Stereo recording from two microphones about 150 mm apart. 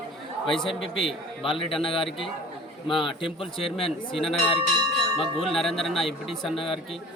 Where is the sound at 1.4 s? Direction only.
35° left (ahead or behind).